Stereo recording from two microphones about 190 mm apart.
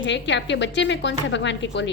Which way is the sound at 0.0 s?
70° left (ahead or behind).